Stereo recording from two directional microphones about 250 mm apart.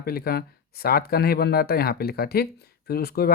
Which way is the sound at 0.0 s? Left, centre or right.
Left.